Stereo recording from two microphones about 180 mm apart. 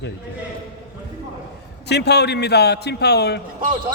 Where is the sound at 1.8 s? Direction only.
65° left (ahead or behind).